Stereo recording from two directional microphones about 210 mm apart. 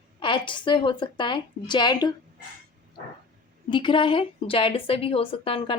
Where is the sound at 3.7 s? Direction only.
25° left (ahead or behind).